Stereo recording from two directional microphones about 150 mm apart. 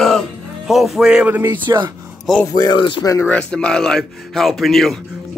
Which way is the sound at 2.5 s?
30° left (ahead or behind).